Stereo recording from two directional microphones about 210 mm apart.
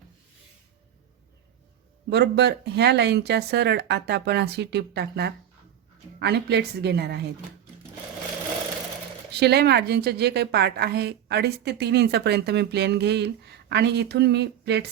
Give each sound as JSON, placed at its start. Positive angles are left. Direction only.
{"t": 2.0, "sound": "a woman's voice", "side_deg": -50}
{"t": 9.3, "sound": "a woman's voice", "side_deg": -50}